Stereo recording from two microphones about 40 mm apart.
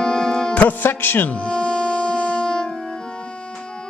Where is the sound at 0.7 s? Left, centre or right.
Left.